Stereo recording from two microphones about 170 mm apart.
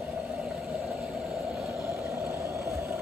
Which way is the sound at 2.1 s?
15° right (ahead or behind).